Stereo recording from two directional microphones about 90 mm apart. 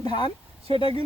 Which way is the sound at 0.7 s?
65° left (ahead or behind).